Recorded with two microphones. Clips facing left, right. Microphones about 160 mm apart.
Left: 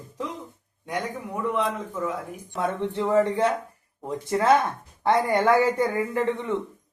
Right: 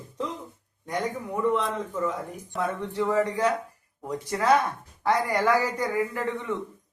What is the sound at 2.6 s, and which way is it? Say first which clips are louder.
Speech: left 2 dB; 30° left (ahead or behind).